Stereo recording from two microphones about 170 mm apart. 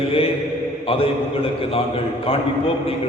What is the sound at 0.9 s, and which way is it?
Speech, 35° left (ahead or behind).